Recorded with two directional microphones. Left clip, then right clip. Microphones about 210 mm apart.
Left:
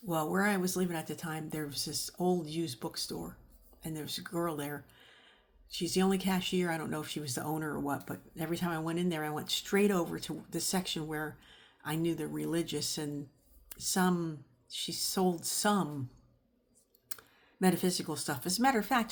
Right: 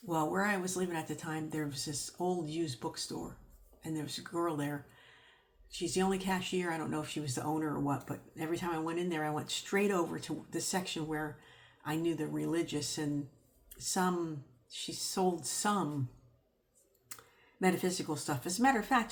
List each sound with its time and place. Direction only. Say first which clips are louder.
0.1 s speech: left 1 dB; 40° left (ahead or behind)
17.1 s typing: left 2 dB; 45° left (ahead or behind)
17.6 s speech: left 1 dB; 45° left (ahead or behind)